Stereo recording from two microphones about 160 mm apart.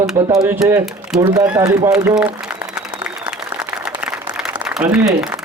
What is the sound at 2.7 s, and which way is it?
Applause, 5° right (ahead or behind).